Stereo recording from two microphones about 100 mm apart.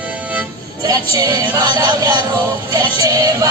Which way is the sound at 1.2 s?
40° right (ahead or behind).